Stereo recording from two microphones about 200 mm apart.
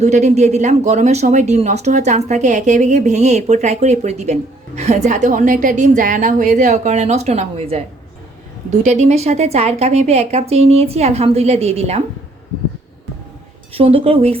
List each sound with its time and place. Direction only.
0.0 s speech: 35° right (ahead or behind)
8.8 s speech: 35° right (ahead or behind)
13.7 s speech: 30° right (ahead or behind)